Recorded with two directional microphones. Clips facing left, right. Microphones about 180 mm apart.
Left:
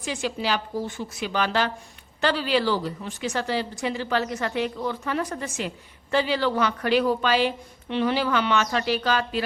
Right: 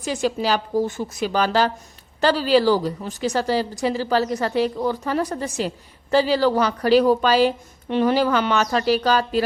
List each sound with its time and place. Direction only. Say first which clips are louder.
0.0 s a woman's voice: right 5 dB; 40° right (ahead or behind)